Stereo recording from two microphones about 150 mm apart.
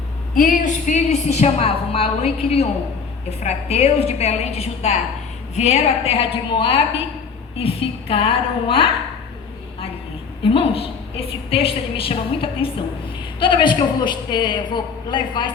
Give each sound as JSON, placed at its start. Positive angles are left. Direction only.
{"t": 0.3, "sound": "a woman's voice", "side_deg": 60}
{"t": 10.4, "sound": "a woman's voice", "side_deg": 35}